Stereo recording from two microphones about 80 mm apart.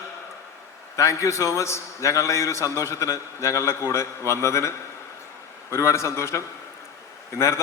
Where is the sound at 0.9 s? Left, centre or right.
Left.